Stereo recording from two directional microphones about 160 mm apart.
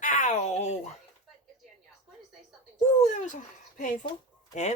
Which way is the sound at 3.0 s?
50° left (ahead or behind).